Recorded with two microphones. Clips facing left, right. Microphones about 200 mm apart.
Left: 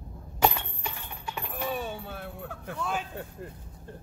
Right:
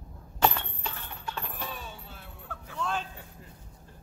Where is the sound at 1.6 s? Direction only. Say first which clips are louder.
Left 9 dB; 60° left (ahead or behind).